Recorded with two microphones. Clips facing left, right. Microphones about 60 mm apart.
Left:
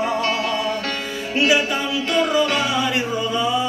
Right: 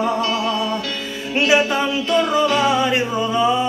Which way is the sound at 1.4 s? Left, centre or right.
Right.